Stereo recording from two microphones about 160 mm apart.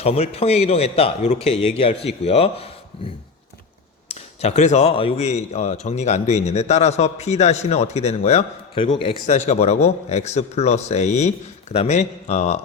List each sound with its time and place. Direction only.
0.0 s a man's voice: 40° left (ahead or behind)
4.1 s speech: 40° left (ahead or behind)
9.2 s speech: 45° left (ahead or behind)